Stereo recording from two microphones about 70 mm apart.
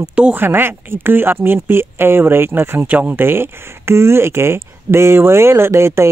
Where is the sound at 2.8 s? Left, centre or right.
Right.